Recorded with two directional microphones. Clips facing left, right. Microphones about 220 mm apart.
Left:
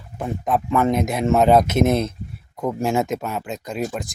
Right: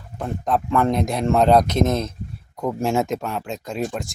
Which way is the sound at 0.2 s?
5° left (ahead or behind).